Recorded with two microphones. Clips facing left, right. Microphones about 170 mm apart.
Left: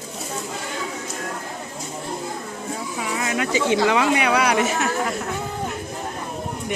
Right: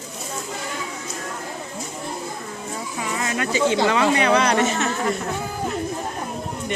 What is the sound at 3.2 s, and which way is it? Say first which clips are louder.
Speech: right 1 dB; 15° left (ahead or behind).